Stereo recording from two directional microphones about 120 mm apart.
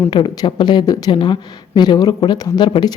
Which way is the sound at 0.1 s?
40° left (ahead or behind).